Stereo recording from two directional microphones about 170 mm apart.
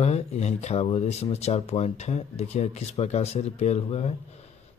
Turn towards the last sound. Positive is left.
turn(degrees=40)  # may be behind; listen again after turning